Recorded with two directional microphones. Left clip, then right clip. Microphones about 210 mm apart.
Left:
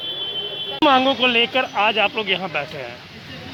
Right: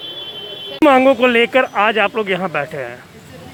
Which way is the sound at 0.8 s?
40° right (ahead or behind).